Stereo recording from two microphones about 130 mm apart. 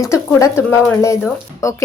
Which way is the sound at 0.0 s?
25° left (ahead or behind).